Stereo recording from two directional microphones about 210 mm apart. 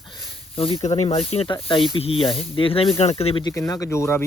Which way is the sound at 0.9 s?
30° left (ahead or behind).